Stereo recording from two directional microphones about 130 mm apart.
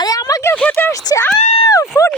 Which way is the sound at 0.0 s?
30° left (ahead or behind).